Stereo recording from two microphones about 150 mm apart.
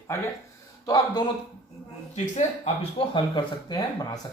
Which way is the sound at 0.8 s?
25° left (ahead or behind).